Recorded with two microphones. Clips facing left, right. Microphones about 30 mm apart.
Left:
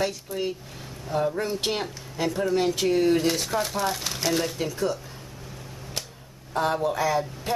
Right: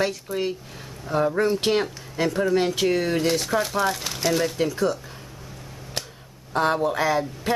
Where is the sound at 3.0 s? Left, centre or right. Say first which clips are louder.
Left 1 dB; centre.